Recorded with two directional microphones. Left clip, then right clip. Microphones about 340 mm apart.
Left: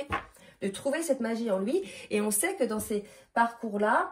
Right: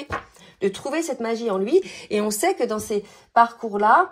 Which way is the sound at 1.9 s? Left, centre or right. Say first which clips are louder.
Right 7 dB; centre.